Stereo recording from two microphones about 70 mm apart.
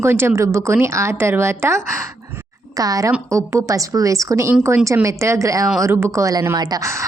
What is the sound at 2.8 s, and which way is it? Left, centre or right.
A woman's voice, right.